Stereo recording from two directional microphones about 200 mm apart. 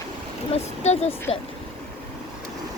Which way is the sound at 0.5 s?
30° left (ahead or behind).